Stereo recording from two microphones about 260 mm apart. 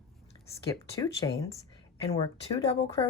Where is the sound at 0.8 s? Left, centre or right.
Centre.